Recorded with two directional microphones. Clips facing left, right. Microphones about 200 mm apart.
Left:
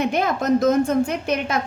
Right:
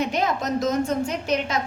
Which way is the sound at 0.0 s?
55° left (ahead or behind).